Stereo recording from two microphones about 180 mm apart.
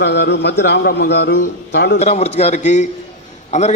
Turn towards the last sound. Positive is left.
turn(degrees=40)  # may be behind; listen again after turning